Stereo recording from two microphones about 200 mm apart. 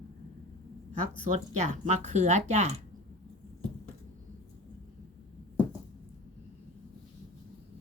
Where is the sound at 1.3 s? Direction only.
35° right (ahead or behind).